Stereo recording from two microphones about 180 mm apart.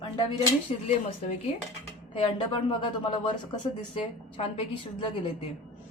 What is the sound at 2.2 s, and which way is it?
A woman's voice, 30° left (ahead or behind).